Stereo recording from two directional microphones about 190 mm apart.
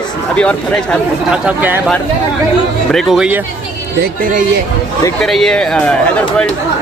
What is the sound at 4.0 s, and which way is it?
Speech, 45° right (ahead or behind).